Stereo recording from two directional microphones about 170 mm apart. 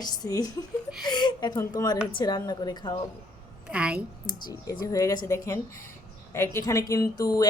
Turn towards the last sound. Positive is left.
turn(degrees=20)  # may be behind; listen again after turning